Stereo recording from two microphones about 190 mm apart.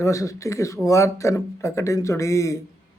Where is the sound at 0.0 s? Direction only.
15° left (ahead or behind).